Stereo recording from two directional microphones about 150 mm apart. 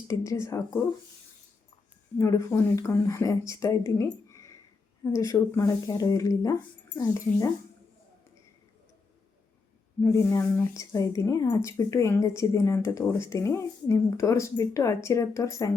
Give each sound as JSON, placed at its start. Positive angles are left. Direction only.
{"t": 0.1, "sound": "speech", "side_deg": 20}
{"t": 2.1, "sound": "speech", "side_deg": 20}
{"t": 10.0, "sound": "speech", "side_deg": 20}